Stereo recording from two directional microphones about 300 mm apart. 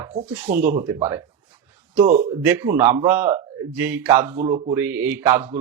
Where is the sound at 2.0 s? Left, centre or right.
Right.